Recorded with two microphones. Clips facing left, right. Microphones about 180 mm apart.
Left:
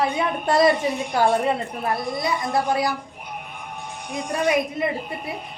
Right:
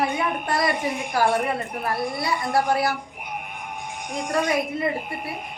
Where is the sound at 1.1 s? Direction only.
25° left (ahead or behind).